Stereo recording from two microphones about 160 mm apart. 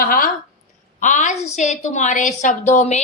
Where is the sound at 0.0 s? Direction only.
65° left (ahead or behind).